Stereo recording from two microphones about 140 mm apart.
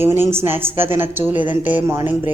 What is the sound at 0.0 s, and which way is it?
A woman's voice, 15° right (ahead or behind).